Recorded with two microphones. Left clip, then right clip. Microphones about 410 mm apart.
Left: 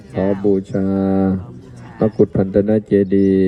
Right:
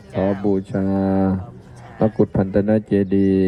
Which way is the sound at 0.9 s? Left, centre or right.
Right.